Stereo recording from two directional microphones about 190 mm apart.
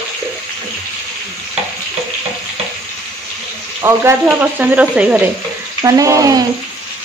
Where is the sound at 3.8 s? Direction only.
10° right (ahead or behind).